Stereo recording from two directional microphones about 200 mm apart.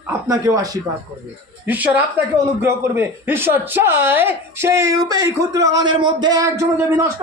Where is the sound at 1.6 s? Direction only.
10° right (ahead or behind).